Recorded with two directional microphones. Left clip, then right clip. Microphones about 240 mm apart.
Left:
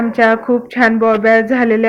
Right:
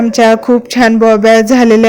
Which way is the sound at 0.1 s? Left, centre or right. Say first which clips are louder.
Right 4 dB; right.